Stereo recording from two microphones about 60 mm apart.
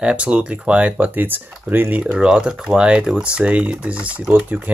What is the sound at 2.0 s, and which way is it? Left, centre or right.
Speech, centre.